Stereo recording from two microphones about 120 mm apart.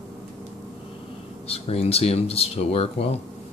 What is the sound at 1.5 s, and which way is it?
Speech, 55° left (ahead or behind).